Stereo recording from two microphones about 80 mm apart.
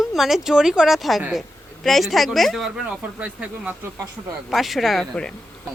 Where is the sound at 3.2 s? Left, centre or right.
Right.